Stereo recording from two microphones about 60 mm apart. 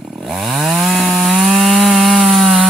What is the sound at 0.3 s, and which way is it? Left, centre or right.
Chainsaw, centre.